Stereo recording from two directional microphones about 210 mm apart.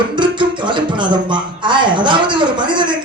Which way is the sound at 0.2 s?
20° right (ahead or behind).